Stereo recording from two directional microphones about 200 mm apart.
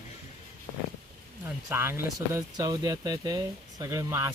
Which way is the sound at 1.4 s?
10° right (ahead or behind).